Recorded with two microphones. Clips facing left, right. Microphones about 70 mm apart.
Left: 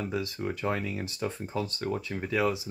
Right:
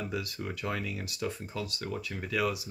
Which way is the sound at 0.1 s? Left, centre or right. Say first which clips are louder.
Left 4 dB; left.